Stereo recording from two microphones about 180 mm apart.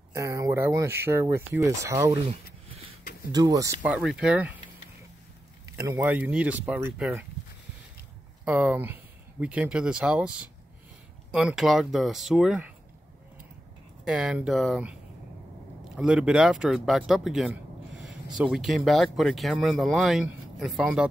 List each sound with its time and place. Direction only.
0.1 s speech: 15° right (ahead or behind)
3.3 s speech: 20° right (ahead or behind)
3.8 s speech: 5° right (ahead or behind)
5.9 s speech: 10° right (ahead or behind)
8.5 s speech: 10° right (ahead or behind)
14.0 s speech: 5° right (ahead or behind)